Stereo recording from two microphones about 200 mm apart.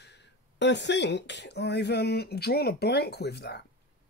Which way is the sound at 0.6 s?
60° left (ahead or behind).